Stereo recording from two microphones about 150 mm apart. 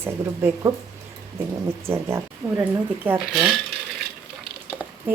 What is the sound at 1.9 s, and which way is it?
Speech, 15° right (ahead or behind).